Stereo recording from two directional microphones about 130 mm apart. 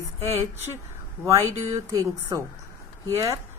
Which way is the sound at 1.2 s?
25° right (ahead or behind).